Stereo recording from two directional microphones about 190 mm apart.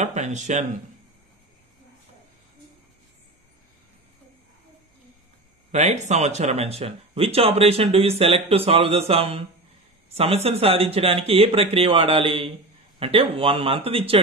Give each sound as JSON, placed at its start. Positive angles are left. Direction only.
{"t": 0.0, "sound": "speech", "side_deg": -40}
{"t": 5.7, "sound": "speech", "side_deg": -35}